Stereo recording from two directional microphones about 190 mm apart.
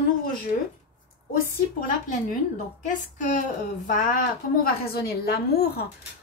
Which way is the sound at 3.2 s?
40° left (ahead or behind).